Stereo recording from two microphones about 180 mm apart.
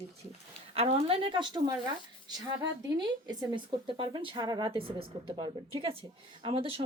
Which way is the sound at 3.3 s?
25° right (ahead or behind).